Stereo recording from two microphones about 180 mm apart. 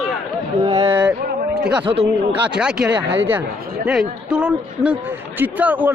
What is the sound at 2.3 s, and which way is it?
A woman's voice, 5° right (ahead or behind).